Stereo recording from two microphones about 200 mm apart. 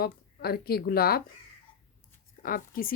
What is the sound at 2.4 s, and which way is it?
Speech, 45° left (ahead or behind).